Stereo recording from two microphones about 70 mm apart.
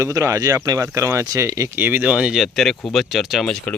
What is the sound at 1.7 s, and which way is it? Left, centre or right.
Speech, right.